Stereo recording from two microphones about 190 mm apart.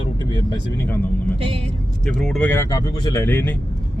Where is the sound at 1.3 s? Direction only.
30° right (ahead or behind).